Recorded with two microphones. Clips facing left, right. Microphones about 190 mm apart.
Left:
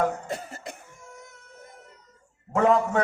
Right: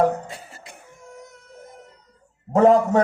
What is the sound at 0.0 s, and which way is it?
Cough, 35° right (ahead or behind).